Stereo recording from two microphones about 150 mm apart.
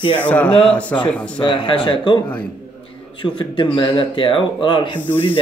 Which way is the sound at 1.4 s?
35° left (ahead or behind).